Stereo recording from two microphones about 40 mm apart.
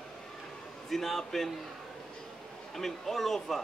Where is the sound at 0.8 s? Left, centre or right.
Centre.